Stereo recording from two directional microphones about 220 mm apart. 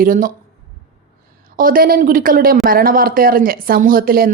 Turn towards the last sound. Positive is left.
turn(degrees=-40)  # may be behind; listen again after turning